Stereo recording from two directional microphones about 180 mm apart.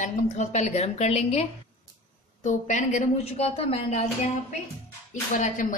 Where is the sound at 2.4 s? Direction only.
40° left (ahead or behind).